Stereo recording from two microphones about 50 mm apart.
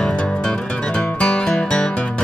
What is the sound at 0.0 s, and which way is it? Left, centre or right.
Music, left.